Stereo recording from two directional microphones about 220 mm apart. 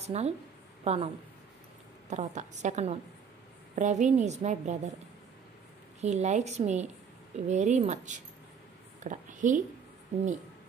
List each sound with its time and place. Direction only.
0.0 s a woman's voice: 30° right (ahead or behind)
5.9 s a woman's voice: 30° right (ahead or behind)